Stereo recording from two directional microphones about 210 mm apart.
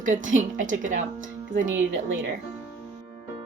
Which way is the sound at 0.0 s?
35° right (ahead or behind).